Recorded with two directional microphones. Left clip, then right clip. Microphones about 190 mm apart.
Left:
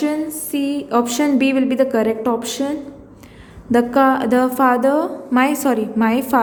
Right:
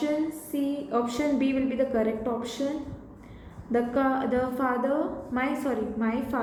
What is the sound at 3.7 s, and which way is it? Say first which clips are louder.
A woman's voice: left 11 dB; 55° left (ahead or behind).